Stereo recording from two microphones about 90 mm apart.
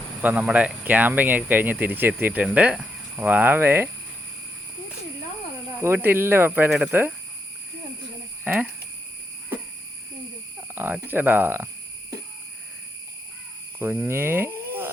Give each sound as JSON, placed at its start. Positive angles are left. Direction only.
{"t": 0.2, "sound": "speech", "side_deg": -20}
{"t": 5.8, "sound": "speech", "side_deg": -25}
{"t": 6.7, "sound": "speech", "side_deg": -10}
{"t": 8.5, "sound": "speech", "side_deg": -20}
{"t": 10.8, "sound": "speech", "side_deg": -20}
{"t": 13.7, "sound": "speech", "side_deg": -25}